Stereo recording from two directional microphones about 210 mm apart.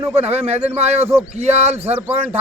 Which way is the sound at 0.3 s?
30° right (ahead or behind).